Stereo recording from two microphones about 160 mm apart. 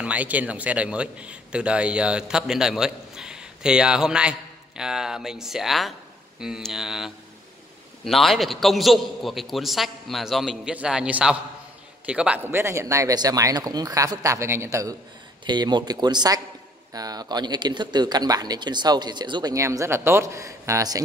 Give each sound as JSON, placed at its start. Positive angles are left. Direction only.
{"t": 0.0, "sound": "a man's voice", "side_deg": -10}